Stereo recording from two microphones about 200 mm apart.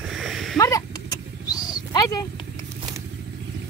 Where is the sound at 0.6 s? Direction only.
15° left (ahead or behind).